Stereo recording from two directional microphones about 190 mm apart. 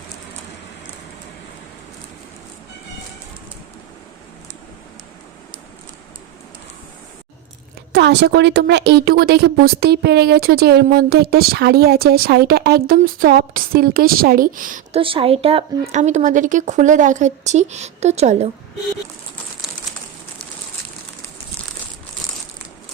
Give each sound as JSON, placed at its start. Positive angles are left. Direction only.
{"t": 7.9, "sound": "a woman's voice", "side_deg": -60}
{"t": 14.9, "sound": "speech", "side_deg": -30}